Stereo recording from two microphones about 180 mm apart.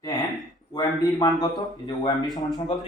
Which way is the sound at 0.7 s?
20° left (ahead or behind).